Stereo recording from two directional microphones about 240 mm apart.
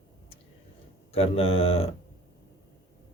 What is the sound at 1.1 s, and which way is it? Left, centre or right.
Speech, left.